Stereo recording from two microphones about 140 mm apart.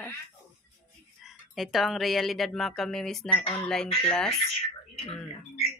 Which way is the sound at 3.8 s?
45° left (ahead or behind).